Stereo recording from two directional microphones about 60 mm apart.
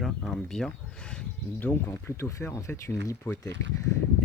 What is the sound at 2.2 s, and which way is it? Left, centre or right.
Speech, left.